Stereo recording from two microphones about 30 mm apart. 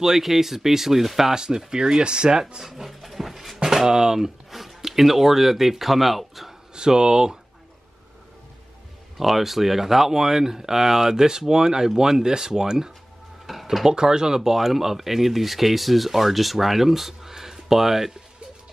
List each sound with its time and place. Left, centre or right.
0.0 s speech: centre
1.3 s speech: right
2.6 s a sound: centre
3.5 s speech: centre
4.5 s a sound: centre
4.8 s speech: centre
6.7 s speech: right
9.2 s speech: centre; by 12.9 s right
13.5 s a sound: centre
13.8 s speech: right